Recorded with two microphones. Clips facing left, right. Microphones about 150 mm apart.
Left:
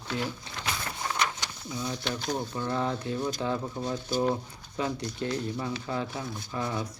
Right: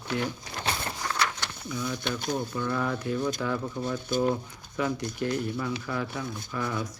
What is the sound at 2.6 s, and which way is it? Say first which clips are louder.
Speech: right 1 dB; 30° left (ahead or behind).